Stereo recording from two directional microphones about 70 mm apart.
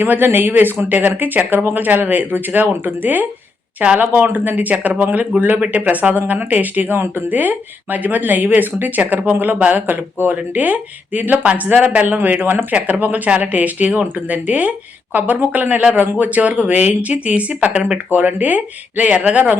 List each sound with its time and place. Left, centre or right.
0.0 s speech: right